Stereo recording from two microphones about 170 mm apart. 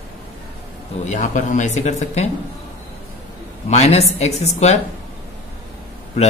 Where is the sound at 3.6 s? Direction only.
40° left (ahead or behind).